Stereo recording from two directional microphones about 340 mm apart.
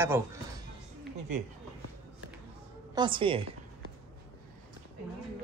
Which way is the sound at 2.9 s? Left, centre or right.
Centre.